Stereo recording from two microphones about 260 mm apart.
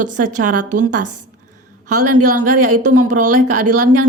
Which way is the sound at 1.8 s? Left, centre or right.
Right.